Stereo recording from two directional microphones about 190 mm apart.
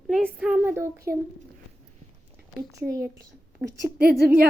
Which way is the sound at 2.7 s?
15° right (ahead or behind).